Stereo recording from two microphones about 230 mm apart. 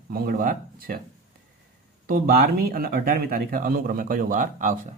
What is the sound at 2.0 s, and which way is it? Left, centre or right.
Speech, right.